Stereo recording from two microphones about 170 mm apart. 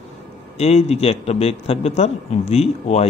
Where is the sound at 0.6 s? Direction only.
35° left (ahead or behind).